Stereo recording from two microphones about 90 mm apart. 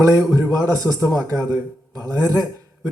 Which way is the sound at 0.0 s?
40° right (ahead or behind).